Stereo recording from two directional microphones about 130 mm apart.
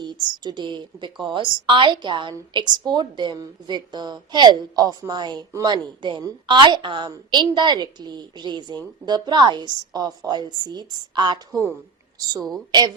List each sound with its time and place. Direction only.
0.0 s a woman's voice: 35° right (ahead or behind)
12.4 s a woman's voice: centre (ahead or behind)